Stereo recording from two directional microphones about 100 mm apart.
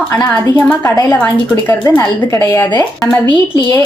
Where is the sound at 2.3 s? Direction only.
35° left (ahead or behind).